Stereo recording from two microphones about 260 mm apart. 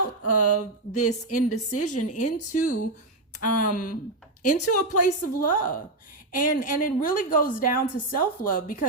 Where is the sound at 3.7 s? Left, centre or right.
Left.